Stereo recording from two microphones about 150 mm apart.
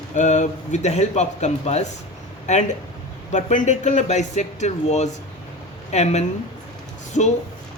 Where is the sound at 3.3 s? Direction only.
55° left (ahead or behind).